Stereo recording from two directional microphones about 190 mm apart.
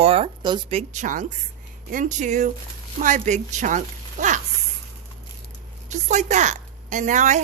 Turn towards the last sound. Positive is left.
turn(degrees=-40)  # may be behind; listen again after turning